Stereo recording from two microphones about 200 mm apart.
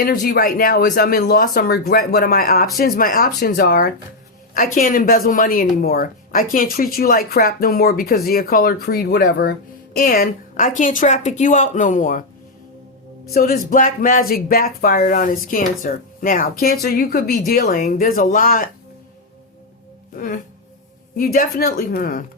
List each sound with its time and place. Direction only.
0.0 s speech: 45° left (ahead or behind)
13.3 s speech: 45° left (ahead or behind)
20.1 s speech: 45° left (ahead or behind)